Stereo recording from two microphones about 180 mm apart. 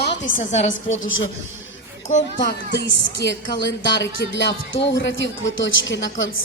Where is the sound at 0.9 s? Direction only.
90° left.